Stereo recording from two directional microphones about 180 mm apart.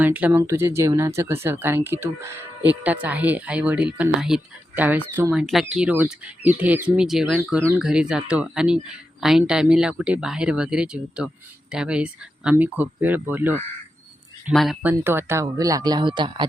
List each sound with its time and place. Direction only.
0.0 s speech: 10° right (ahead or behind)
14.5 s speech: centre (ahead or behind); by 16.5 s 25° right (ahead or behind)